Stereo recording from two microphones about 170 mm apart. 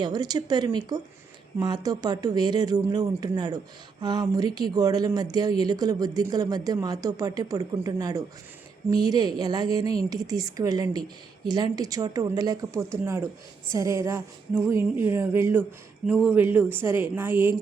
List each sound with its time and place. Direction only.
0.0 s speech: 25° right (ahead or behind)